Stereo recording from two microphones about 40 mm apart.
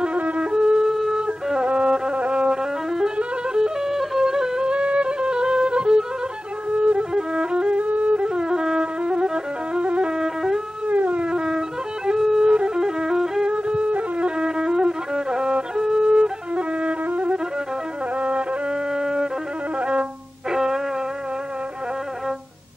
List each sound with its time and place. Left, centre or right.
0.0 s flute: right
0.5 s wind instrument: centre
1.1 s music: centre
7.8 s flute: right
8.2 s music: centre
10.1 s music: centre
10.9 s howl: right
11.2 s music: centre
13.5 s wind instrument: right
14.4 s music: centre
15.5 s flute: centre
18.9 s music: centre
20.5 s music: centre